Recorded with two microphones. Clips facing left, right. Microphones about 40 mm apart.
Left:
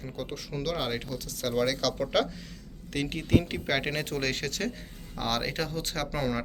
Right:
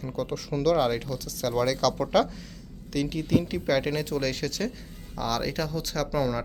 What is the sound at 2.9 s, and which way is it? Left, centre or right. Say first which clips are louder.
Speech: right 1 dB; left.